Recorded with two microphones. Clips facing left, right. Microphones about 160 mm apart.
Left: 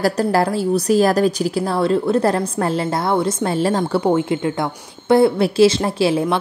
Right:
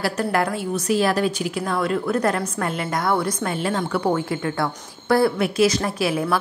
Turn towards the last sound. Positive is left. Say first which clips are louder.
# left 5 dB
turn(degrees=30)  # may be behind; listen again after turning